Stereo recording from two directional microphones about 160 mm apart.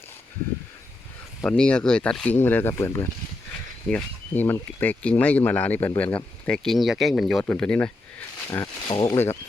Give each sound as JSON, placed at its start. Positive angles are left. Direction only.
{"t": 1.5, "sound": "speech", "side_deg": 5}
{"t": 8.4, "sound": "a sound", "side_deg": 20}
{"t": 9.1, "sound": "speech", "side_deg": 15}